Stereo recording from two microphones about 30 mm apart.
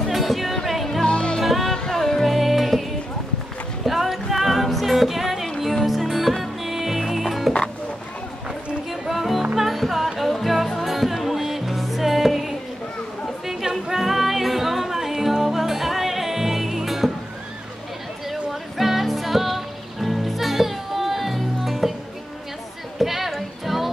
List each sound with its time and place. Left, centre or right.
0.1 s music: centre
1.0 s music: left
1.4 s music: centre
1.7 s music: centre
2.2 s music: centre
9.0 s music: centre
18.3 s music: centre
22.9 s music: centre